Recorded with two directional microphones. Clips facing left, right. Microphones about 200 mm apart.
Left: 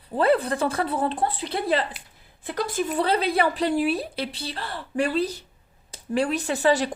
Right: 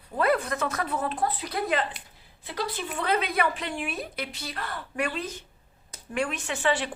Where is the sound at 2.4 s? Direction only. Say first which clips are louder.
Left 6 dB; 50° left (ahead or behind).